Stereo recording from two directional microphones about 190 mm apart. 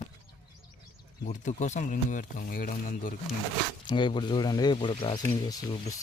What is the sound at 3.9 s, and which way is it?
Speech, 25° left (ahead or behind).